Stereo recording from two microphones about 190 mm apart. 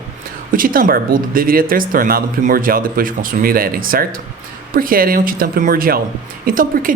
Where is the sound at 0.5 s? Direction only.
50° right (ahead or behind).